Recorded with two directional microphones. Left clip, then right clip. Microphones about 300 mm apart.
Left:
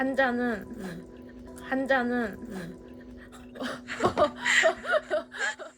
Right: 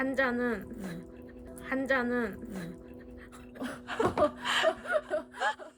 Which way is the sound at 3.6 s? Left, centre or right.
Centre.